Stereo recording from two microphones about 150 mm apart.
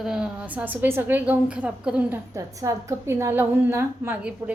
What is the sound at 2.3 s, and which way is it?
A woman's voice, 20° right (ahead or behind).